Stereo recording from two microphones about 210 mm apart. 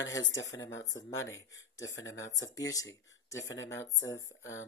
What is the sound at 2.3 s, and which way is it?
Speech, 15° left (ahead or behind).